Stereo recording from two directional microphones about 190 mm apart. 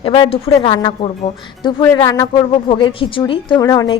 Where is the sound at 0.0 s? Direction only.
30° left (ahead or behind).